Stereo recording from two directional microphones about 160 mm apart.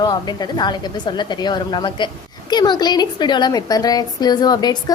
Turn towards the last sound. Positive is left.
turn(degrees=25)  # may be behind; listen again after turning